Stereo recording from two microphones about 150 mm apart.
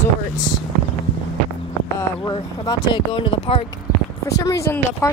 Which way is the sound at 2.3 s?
35° left (ahead or behind).